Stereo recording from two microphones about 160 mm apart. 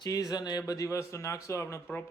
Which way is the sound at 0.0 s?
25° left (ahead or behind).